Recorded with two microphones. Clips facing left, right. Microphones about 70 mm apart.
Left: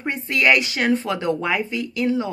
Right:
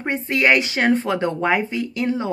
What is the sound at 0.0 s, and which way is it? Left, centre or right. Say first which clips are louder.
Speech: right 1 dB; right.